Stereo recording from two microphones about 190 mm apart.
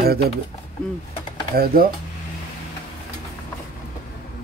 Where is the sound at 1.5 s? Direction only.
50° right (ahead or behind).